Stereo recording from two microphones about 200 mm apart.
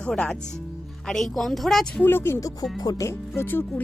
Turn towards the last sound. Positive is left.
turn(degrees=10)  # may be behind; listen again after turning